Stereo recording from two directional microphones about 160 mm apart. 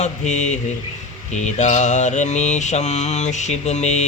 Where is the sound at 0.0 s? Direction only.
45° left (ahead or behind).